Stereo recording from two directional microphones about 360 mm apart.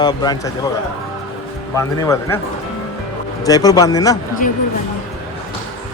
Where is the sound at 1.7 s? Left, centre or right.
Centre.